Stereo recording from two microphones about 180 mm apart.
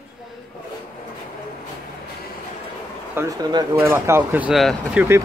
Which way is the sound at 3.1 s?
20° right (ahead or behind).